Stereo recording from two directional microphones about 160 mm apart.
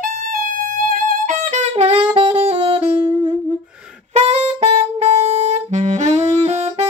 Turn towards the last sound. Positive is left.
turn(degrees=-45)  # may be behind; listen again after turning